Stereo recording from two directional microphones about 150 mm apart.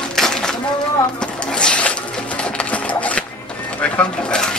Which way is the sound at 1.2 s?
5° left (ahead or behind).